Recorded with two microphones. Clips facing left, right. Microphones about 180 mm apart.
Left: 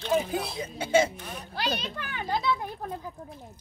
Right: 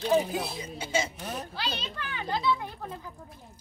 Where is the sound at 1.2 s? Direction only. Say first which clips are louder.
Right 4 dB; 45° right (ahead or behind).